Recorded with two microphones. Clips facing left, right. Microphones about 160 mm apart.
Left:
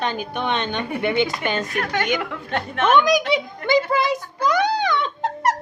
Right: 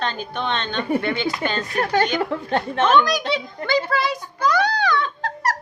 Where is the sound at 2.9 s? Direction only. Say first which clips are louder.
Left 3 dB; 15° left (ahead or behind).